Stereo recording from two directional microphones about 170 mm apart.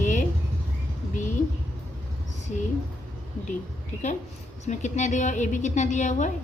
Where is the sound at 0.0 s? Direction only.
50° left (ahead or behind).